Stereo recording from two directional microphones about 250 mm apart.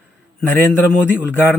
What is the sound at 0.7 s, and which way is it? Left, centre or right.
Speech, centre.